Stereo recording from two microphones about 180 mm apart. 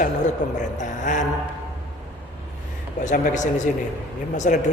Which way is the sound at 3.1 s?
45° left (ahead or behind).